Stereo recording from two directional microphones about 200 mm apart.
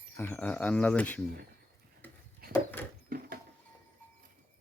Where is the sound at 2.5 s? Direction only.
10° left (ahead or behind).